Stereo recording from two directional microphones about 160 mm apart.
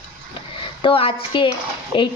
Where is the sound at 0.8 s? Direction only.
35° left (ahead or behind).